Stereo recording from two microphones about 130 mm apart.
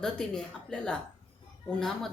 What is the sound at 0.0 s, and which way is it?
Speech, 5° left (ahead or behind).